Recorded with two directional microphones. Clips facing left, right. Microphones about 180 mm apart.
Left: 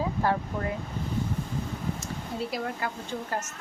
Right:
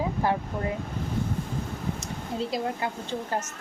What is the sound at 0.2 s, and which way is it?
Speech, 15° right (ahead or behind).